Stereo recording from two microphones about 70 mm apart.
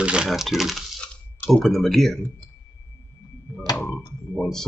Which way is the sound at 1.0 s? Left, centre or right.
Centre.